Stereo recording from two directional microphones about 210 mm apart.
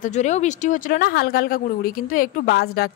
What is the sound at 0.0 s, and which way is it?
A woman's voice, 35° left (ahead or behind).